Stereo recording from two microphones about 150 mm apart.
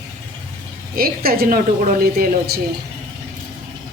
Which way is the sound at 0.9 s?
80° right.